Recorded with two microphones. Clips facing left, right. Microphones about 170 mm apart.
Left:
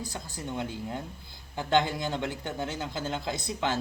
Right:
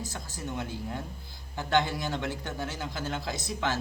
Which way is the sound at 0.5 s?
15° left (ahead or behind).